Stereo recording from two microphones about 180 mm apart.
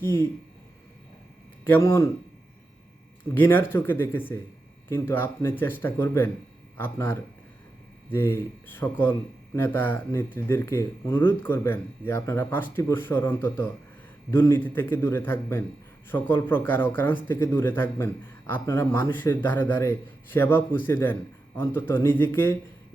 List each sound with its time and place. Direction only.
0.0 s speech: 15° left (ahead or behind)
1.7 s speech: 15° left (ahead or behind)
3.3 s speech: 10° left (ahead or behind)